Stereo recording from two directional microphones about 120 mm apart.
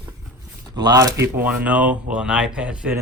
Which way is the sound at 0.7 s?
35° right (ahead or behind).